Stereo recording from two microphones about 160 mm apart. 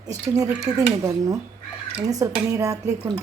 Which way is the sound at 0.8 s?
20° right (ahead or behind).